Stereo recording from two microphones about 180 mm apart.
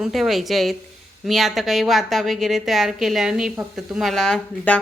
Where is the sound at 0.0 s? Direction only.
Centre (ahead or behind).